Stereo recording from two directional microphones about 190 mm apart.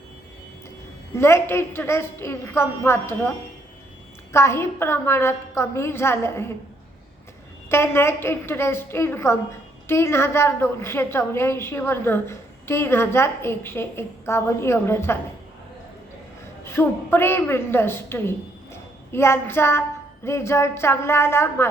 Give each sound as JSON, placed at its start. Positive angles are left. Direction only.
{"t": 1.1, "sound": "a woman's voice", "side_deg": 15}
{"t": 7.7, "sound": "a woman's voice", "side_deg": 15}
{"t": 16.6, "sound": "a woman's voice", "side_deg": 10}